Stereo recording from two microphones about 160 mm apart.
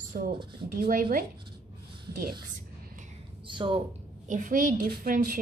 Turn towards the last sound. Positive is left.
turn(degrees=-60)  # may be behind; listen again after turning